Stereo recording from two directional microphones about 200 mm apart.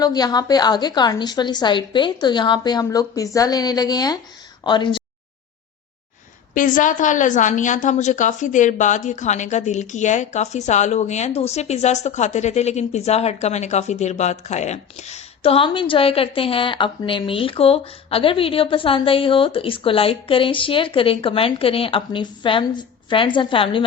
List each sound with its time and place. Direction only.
0.0 s a woman's voice: 20° left (ahead or behind)
6.5 s a woman's voice: 40° left (ahead or behind); by 23.8 s 25° left (ahead or behind)